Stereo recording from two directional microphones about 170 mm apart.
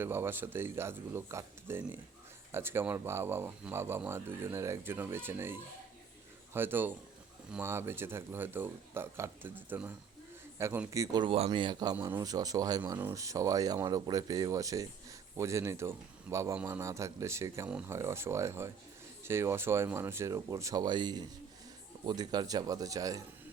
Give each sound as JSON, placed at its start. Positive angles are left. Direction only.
{"t": 0.0, "sound": "speech", "side_deg": -15}